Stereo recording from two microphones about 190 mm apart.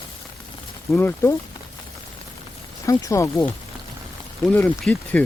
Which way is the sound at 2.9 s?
15° left (ahead or behind).